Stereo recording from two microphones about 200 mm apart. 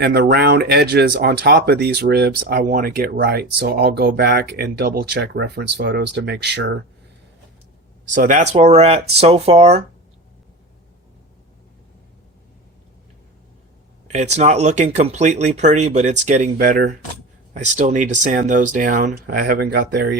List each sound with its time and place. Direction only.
0.0 s speech: 55° right (ahead or behind)
8.1 s speech: 40° right (ahead or behind)
14.1 s speech: 35° right (ahead or behind); by 20.1 s 55° right (ahead or behind)